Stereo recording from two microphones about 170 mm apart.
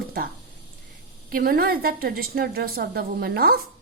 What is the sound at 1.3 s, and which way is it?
A woman's voice, 60° right (ahead or behind).